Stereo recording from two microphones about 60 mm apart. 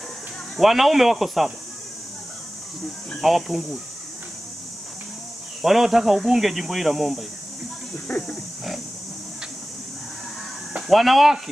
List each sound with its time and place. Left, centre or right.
0.6 s speech: centre
3.2 s speech: centre
5.6 s speech: centre
8.1 s wild animals: left
10.9 s speech: centre